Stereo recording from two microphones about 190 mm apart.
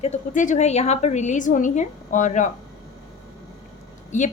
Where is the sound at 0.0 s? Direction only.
40° left (ahead or behind).